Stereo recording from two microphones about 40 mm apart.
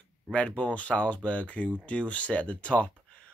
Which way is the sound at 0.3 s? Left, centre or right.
Left.